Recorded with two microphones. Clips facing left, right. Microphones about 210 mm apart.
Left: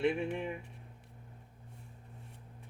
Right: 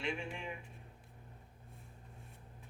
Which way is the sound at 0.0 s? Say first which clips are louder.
Left 9 dB; 60° left (ahead or behind).